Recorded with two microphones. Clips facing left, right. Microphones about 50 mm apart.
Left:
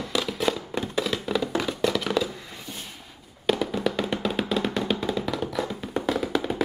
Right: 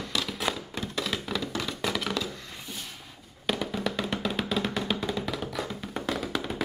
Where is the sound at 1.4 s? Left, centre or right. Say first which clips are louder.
Left 6 dB; centre.